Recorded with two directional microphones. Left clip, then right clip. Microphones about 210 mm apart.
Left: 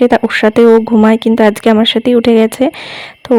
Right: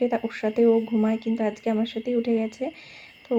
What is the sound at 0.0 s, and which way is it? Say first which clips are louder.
Speech: left 16 dB; 50° left (ahead or behind).